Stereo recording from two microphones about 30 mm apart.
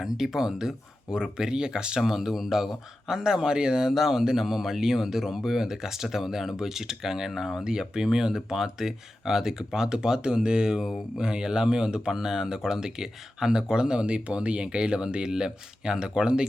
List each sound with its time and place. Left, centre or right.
0.0 s speech: centre
2.0 s speech: centre
3.1 s speech: right
7.6 s speech: right
15.3 s speech: right